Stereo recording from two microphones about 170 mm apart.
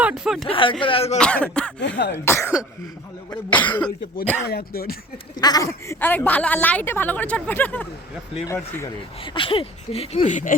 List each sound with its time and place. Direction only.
0.0 s a sound: 5° right (ahead or behind)
0.4 s speech: 30° left (ahead or behind)
1.2 s a woman's voice: 5° left (ahead or behind)
1.8 s speech: 90° left
2.1 s a woman's voice: 15° left (ahead or behind)
3.5 s a woman's voice: 10° left (ahead or behind)
4.4 s speech: 65° left (ahead or behind)
5.4 s a woman's voice: 20° left (ahead or behind)
9.2 s speech: 30° left (ahead or behind); by 10.5 s 45° left (ahead or behind)